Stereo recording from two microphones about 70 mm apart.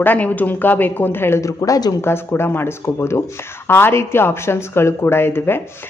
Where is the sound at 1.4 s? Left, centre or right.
Left.